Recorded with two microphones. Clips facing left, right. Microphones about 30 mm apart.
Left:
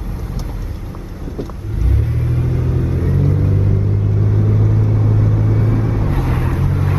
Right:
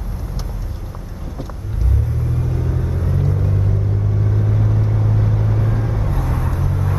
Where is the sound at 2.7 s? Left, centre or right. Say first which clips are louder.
Left 4 dB; centre.